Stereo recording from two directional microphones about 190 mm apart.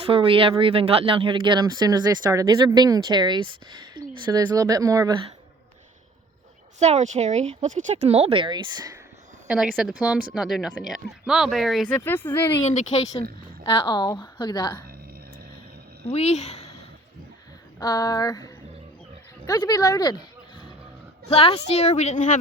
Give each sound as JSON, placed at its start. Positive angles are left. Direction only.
{"t": 0.0, "sound": "speech", "side_deg": -30}
{"t": 3.9, "sound": "a sound", "side_deg": -25}
{"t": 4.4, "sound": "speech", "side_deg": -20}
{"t": 6.7, "sound": "speech", "side_deg": -35}
{"t": 9.5, "sound": "speech", "side_deg": -5}
{"t": 11.9, "sound": "speech", "side_deg": 10}
{"t": 12.6, "sound": "a woman's voice", "side_deg": 35}
{"t": 13.7, "sound": "a woman's voice", "side_deg": 20}
{"t": 16.1, "sound": "a woman's voice", "side_deg": 35}
{"t": 17.7, "sound": "a woman's voice", "side_deg": 20}
{"t": 21.2, "sound": "a woman's voice", "side_deg": 30}